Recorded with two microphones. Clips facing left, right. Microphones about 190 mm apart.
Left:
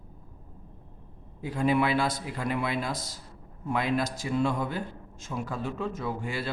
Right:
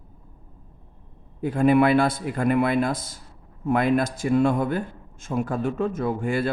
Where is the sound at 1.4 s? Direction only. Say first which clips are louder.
Right 7 dB; 55° right (ahead or behind).